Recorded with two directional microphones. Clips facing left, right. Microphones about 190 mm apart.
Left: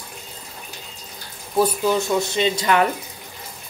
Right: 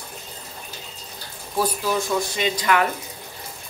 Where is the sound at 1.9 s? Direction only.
25° left (ahead or behind).